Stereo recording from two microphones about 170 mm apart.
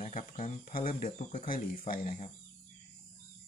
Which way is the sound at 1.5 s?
55° left (ahead or behind).